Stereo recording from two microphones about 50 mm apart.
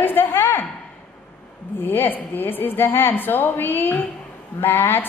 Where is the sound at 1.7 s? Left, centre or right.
Left.